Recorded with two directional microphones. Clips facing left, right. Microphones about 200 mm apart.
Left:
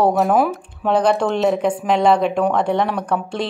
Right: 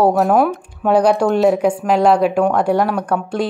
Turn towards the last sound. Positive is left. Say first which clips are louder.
# right 3 dB
turn(degrees=-5)  # may be behind; listen again after turning